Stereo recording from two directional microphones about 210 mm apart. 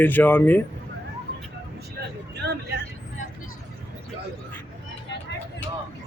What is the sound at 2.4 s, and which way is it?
Vehicle, 55° right (ahead or behind).